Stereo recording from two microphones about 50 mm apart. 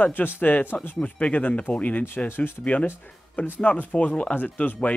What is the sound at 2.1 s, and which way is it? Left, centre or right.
Speech, left.